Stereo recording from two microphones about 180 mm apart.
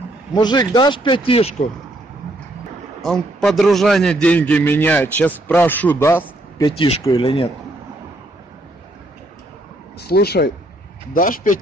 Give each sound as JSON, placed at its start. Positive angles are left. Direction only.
{"t": 0.3, "sound": "speech", "side_deg": 25}
{"t": 3.0, "sound": "a man's voice", "side_deg": 0}
{"t": 7.1, "sound": "speech", "side_deg": 30}
{"t": 9.9, "sound": "speech", "side_deg": 60}
{"t": 11.1, "sound": "speech", "side_deg": 50}